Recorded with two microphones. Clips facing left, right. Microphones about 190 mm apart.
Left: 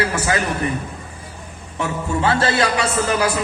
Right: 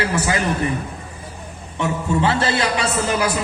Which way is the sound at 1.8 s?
25° right (ahead or behind).